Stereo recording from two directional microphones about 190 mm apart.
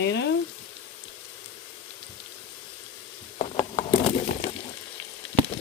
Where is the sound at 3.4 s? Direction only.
30° left (ahead or behind).